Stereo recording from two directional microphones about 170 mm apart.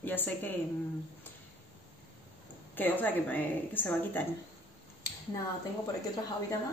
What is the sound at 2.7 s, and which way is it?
Speech, 10° left (ahead or behind).